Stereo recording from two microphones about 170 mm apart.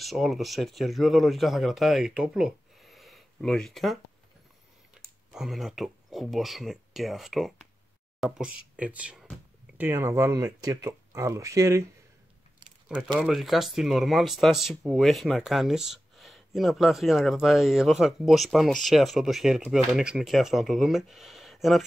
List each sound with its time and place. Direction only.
0.0 s speech: centre (ahead or behind)
5.3 s speech: centre (ahead or behind)
9.8 s speech: 15° right (ahead or behind)
12.8 s speech: 5° right (ahead or behind)